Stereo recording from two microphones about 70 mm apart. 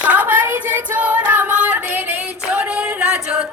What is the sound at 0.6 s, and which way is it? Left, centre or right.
Female singing, right.